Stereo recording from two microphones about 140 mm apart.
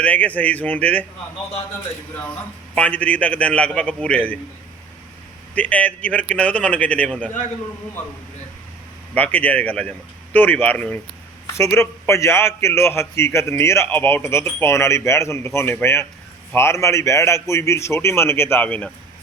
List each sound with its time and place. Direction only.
0.0 s a man's voice: 10° left (ahead or behind)
2.1 s a man's voice: 10° left (ahead or behind)
5.5 s a man's voice: 10° left (ahead or behind)
9.1 s a man's voice: 10° left (ahead or behind)